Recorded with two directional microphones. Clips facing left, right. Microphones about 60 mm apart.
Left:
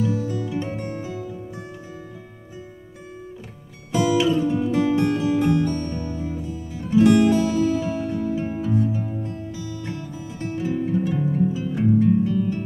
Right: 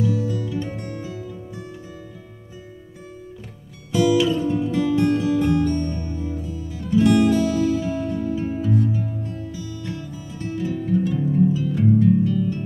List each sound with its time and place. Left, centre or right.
0.0 s music: left
3.9 s music: left